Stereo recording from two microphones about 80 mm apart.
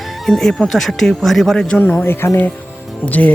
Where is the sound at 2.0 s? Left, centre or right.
Left.